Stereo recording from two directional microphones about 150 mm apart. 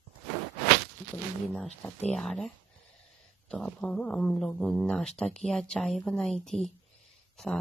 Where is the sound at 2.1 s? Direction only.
Centre (ahead or behind).